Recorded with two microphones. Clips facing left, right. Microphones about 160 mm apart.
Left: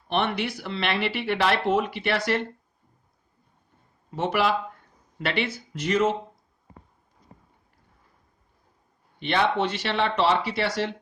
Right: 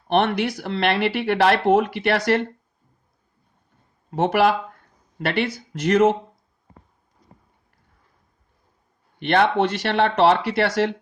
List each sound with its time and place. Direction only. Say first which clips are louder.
0.1 s speech: right 6 dB; 50° right (ahead or behind)
2.0 s speech: right 5 dB; 45° right (ahead or behind)
4.1 s speech: right 6 dB; 55° right (ahead or behind)
9.2 s speech: right 5 dB; 50° right (ahead or behind)